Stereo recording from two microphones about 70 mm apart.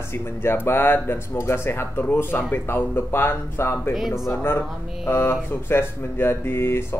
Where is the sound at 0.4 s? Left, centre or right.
Left.